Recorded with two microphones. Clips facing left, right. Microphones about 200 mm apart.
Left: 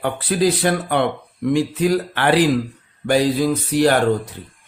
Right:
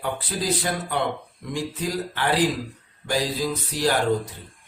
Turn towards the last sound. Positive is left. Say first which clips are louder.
# left 7 dB
turn(degrees=60)  # may be behind; listen again after turning